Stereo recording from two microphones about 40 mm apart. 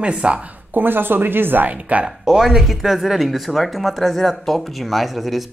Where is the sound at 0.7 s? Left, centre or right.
Right.